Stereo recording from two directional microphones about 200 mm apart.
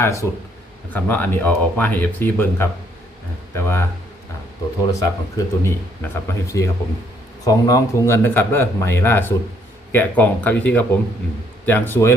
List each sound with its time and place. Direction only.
0.0 s speech: 15° left (ahead or behind)
4.9 s speech: 15° left (ahead or behind)